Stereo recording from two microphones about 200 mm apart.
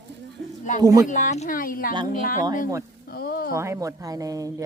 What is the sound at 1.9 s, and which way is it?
Speech, 25° right (ahead or behind).